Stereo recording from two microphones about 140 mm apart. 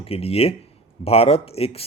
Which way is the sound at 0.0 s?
45° left (ahead or behind).